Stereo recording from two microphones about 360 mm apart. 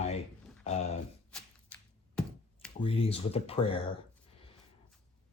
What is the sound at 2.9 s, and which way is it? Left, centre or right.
Speech, centre.